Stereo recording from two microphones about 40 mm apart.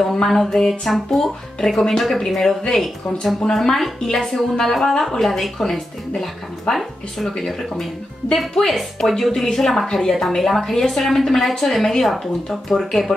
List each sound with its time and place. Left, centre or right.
0.3 s speech: centre
3.5 s speech: centre